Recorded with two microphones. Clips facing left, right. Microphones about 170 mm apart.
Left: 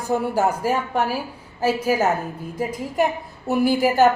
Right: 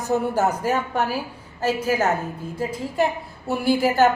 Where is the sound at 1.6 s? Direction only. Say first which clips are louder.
Left 2 dB; 10° left (ahead or behind).